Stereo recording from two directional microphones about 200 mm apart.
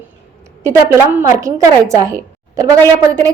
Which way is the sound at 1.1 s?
15° right (ahead or behind).